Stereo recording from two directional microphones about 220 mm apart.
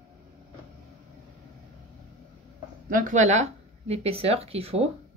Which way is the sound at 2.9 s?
35° right (ahead or behind).